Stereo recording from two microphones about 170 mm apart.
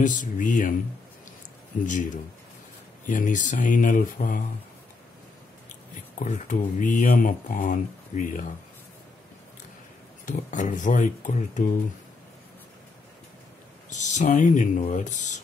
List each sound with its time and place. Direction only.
0.0 s speech: 50° left (ahead or behind)
1.9 s speech: 50° left (ahead or behind)
5.7 s speech: 45° left (ahead or behind)
10.2 s speech: 45° left (ahead or behind)
13.8 s speech: 45° left (ahead or behind)